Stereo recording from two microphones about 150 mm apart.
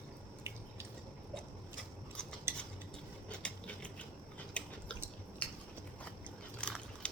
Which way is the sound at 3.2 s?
5° left (ahead or behind).